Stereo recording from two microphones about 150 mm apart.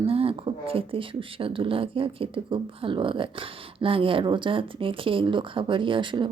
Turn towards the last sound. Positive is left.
turn(degrees=-35)  # may be behind; listen again after turning